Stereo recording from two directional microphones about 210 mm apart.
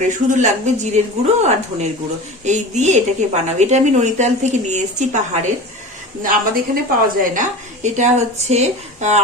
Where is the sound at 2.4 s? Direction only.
35° right (ahead or behind).